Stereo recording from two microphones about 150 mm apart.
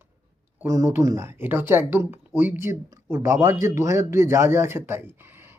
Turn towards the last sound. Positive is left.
turn(degrees=-15)  # may be behind; listen again after turning